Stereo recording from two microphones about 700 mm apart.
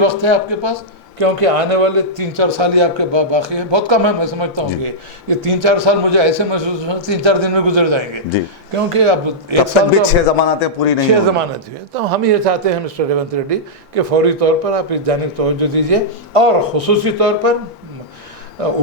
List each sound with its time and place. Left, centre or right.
0.0 s a man's voice: right
10.1 s a man's voice: left
11.9 s speech: right
18.6 s speech: right